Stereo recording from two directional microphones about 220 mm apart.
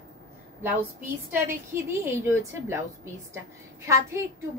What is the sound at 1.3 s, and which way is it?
A woman's voice, 10° right (ahead or behind).